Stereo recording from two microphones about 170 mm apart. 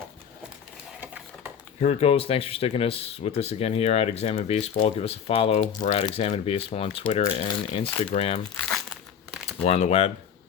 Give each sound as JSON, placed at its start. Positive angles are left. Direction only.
{"t": 1.8, "sound": "speech", "side_deg": 35}
{"t": 9.6, "sound": "speech", "side_deg": 40}